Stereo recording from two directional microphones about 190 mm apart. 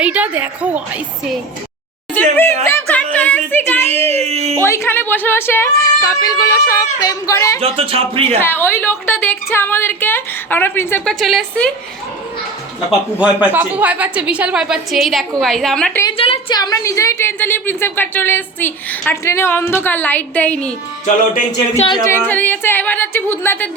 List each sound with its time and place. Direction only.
0.0 s a woman's voice: 10° right (ahead or behind)
2.6 s music: 10° left (ahead or behind)
3.7 s a woman's voice: 10° left (ahead or behind)
3.9 s a child's voice: 35° right (ahead or behind)
4.5 s a woman's voice: 15° left (ahead or behind)
7.6 s speech: 30° right (ahead or behind)
8.4 s a woman's voice: 10° left (ahead or behind)
13.1 s a woman's voice: 5° right (ahead or behind)
16.0 s a woman's voice: 30° left (ahead or behind); by 20.7 s 5° left (ahead or behind)
21.8 s speech: 25° left (ahead or behind)
22.3 s a woman's voice: 10° left (ahead or behind)